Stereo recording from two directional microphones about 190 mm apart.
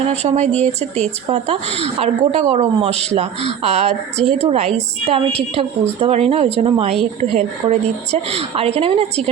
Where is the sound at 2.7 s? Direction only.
30° right (ahead or behind).